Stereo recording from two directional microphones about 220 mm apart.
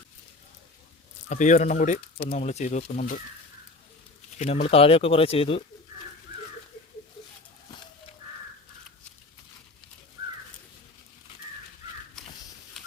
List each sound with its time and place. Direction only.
1.3 s speech: 35° left (ahead or behind)
4.4 s speech: 30° left (ahead or behind)
12.8 s a sound: centre (ahead or behind)